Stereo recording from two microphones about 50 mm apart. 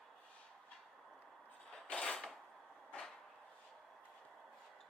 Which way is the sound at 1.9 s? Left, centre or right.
Centre.